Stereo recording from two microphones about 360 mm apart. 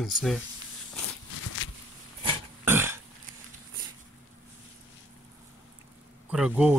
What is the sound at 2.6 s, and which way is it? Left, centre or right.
Burping, centre.